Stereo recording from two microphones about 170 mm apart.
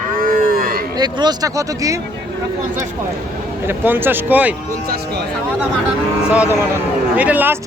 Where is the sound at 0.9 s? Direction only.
25° right (ahead or behind).